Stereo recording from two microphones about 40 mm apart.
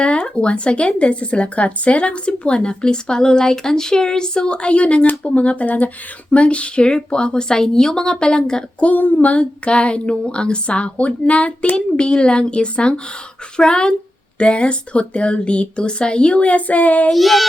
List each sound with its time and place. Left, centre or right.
0.0 s speech: left
8.8 s a sound: left
9.3 s speech: left
11.9 s speech: left
17.1 s child singing: centre